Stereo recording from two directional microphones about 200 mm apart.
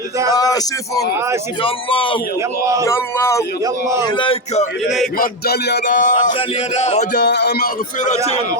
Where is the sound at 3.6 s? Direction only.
15° right (ahead or behind).